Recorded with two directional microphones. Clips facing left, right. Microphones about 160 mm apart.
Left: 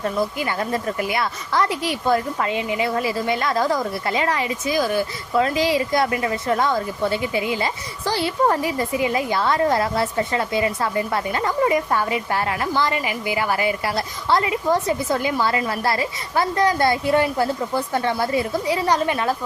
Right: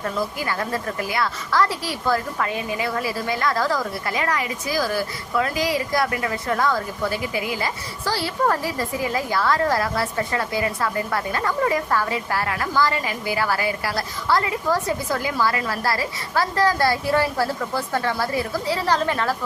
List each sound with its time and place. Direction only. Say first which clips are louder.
0.0 s a woman's voice: left 3 dB; 20° left (ahead or behind)